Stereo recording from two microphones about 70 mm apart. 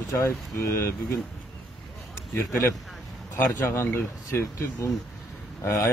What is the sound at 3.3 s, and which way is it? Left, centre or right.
A man's voice, left.